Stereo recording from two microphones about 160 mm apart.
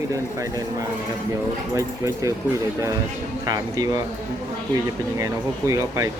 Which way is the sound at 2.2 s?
20° right (ahead or behind).